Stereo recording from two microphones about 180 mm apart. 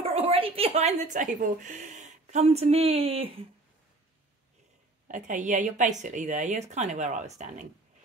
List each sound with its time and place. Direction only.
0.0 s a woman's voice: 30° right (ahead or behind)
5.0 s a woman's voice: 45° right (ahead or behind)